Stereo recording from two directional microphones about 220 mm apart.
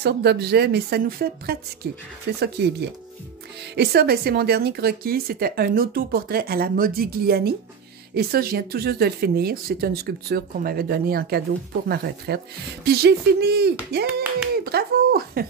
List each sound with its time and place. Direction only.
0.0 s a woman's voice: 45° right (ahead or behind)
3.7 s a woman's voice: 45° right (ahead or behind)